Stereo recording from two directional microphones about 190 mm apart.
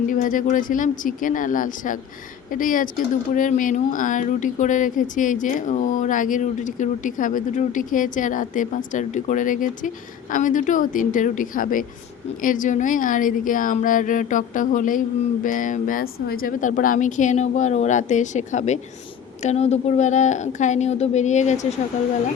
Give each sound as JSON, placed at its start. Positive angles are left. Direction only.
{"t": 0.1, "sound": "a woman's voice", "side_deg": 45}